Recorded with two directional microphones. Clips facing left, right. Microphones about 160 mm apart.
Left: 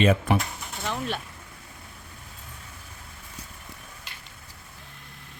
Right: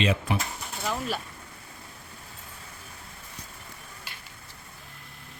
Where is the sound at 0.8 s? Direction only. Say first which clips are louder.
Even; 5° right (ahead or behind).